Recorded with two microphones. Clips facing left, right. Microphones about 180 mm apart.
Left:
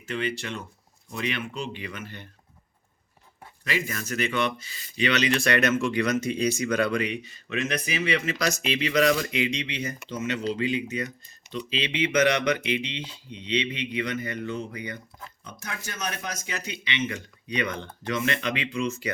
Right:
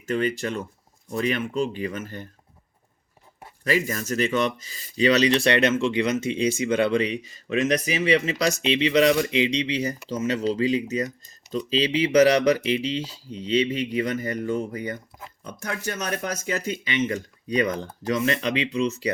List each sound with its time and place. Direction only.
0.1 s speech: 45° right (ahead or behind)
3.6 s speech: 40° right (ahead or behind)
16.0 s speech: 55° right (ahead or behind); by 19.1 s 35° right (ahead or behind)